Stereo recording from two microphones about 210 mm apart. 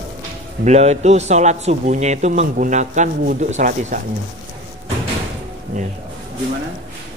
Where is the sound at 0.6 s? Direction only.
30° right (ahead or behind).